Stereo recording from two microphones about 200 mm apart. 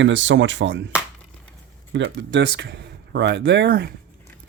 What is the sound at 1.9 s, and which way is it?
Speech, 65° right (ahead or behind).